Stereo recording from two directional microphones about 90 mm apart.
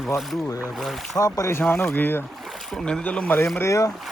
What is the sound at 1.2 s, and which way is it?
Speech, 35° left (ahead or behind).